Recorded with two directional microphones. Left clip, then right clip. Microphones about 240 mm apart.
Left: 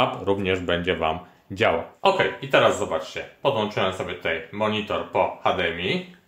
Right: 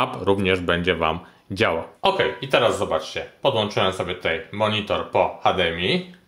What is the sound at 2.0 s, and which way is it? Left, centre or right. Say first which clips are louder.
Speech: right 1 dB; right.